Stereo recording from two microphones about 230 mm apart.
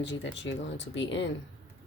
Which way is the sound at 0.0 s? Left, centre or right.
Left.